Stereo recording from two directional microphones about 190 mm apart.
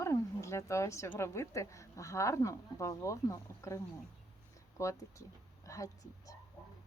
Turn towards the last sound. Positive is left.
turn(degrees=15)  # may be behind; listen again after turning